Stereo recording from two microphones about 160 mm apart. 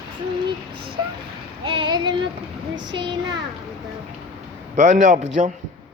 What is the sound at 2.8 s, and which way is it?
Speech, 30° right (ahead or behind).